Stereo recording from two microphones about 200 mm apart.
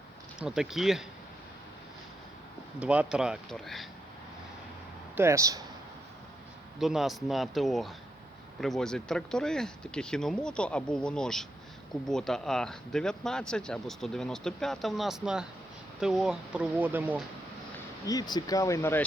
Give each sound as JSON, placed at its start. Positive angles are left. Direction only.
{"t": 0.3, "sound": "speech", "side_deg": -5}
{"t": 2.8, "sound": "speech", "side_deg": -5}
{"t": 5.1, "sound": "speech", "side_deg": -15}
{"t": 6.7, "sound": "speech", "side_deg": 0}
{"t": 18.0, "sound": "speech", "side_deg": 20}